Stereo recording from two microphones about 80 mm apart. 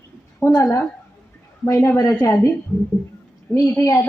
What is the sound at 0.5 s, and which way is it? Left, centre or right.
A woman's voice, left.